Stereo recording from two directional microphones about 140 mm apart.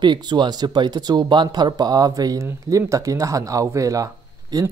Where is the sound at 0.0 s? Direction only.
30° right (ahead or behind).